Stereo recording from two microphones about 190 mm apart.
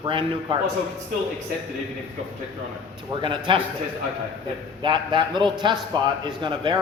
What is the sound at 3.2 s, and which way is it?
Speech, 25° right (ahead or behind).